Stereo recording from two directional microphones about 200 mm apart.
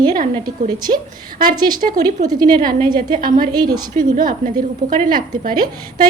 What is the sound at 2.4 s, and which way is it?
A woman's voice, 45° right (ahead or behind).